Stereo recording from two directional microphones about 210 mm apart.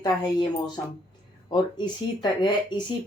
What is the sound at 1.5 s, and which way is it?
Speech, 20° left (ahead or behind).